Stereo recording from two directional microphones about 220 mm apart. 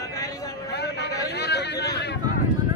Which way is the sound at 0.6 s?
50° left (ahead or behind).